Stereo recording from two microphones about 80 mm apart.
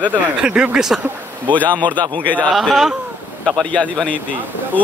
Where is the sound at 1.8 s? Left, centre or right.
Right.